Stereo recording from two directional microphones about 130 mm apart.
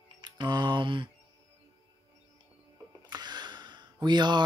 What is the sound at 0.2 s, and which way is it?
Mantra, 35° right (ahead or behind).